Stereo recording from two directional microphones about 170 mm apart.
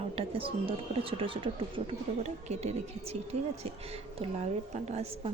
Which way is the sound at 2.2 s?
40° right (ahead or behind).